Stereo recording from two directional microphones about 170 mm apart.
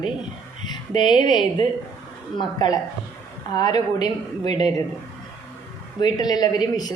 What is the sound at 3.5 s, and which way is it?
A woman's voice, 25° left (ahead or behind).